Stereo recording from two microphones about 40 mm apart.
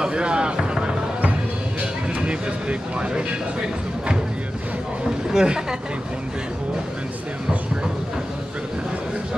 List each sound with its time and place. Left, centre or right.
0.0 s music: right
2.1 s vehicle: right
5.3 s speech: centre